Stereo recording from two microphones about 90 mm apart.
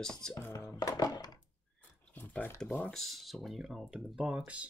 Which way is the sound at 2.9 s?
5° left (ahead or behind).